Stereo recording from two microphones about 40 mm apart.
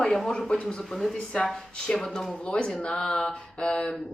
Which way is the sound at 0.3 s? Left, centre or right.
Centre.